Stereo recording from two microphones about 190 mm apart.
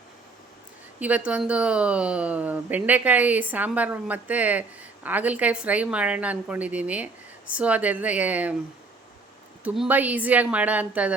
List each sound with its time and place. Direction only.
0.9 s speech: 10° right (ahead or behind)
9.6 s speech: 5° right (ahead or behind)